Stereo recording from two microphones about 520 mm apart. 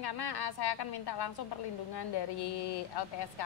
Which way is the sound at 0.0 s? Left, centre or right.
Left.